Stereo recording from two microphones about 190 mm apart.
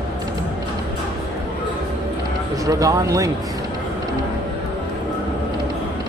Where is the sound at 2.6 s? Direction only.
15° right (ahead or behind).